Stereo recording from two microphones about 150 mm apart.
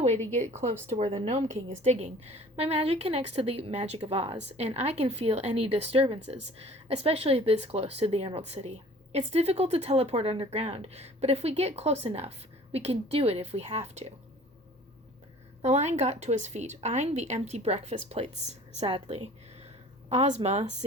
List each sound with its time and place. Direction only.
0.0 s a sound: 45° right (ahead or behind)
0.3 s a woman's voice: 50° right (ahead or behind)
15.6 s a woman's voice: 50° right (ahead or behind)